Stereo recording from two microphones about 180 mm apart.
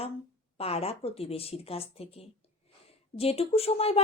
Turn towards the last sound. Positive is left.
turn(degrees=35)  # may be behind; listen again after turning